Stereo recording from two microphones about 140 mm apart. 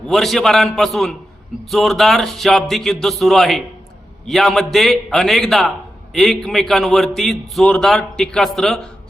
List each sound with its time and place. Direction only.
0.1 s a man's voice: centre (ahead or behind)